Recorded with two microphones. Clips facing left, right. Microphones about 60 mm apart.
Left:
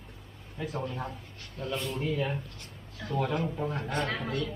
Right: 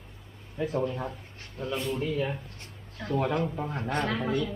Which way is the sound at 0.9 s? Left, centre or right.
Centre.